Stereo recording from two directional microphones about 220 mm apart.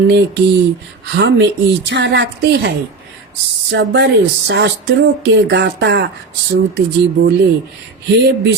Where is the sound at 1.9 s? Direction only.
50° right (ahead or behind).